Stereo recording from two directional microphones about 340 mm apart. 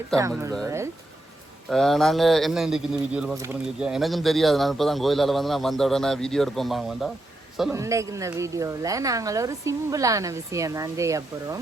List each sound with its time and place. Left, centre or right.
0.2 s speech: centre
0.6 s a sound: centre
1.7 s speech: centre